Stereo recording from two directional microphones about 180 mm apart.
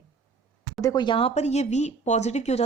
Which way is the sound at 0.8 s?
20° left (ahead or behind).